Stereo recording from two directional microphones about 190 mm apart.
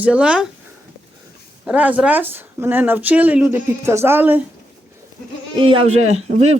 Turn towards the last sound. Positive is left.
turn(degrees=-35)  # may be behind; listen again after turning